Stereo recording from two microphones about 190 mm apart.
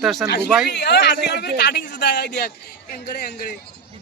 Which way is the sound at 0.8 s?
65° left (ahead or behind).